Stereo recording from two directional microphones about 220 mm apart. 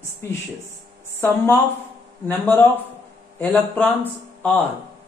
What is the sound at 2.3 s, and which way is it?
Speech, 10° left (ahead or behind).